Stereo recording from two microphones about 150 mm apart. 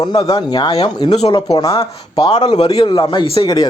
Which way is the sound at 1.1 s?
45° left (ahead or behind).